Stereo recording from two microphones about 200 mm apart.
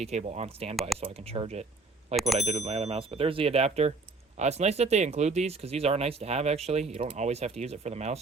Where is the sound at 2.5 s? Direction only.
30° right (ahead or behind).